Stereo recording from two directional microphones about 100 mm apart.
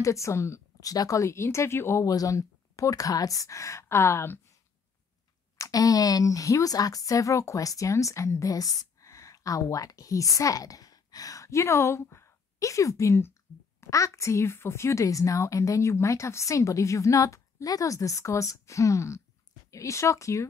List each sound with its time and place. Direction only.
0.0 s speech: 30° left (ahead or behind)
5.6 s speech: 35° left (ahead or behind)